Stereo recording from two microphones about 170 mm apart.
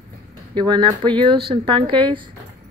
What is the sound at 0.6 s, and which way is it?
Speech, 25° right (ahead or behind).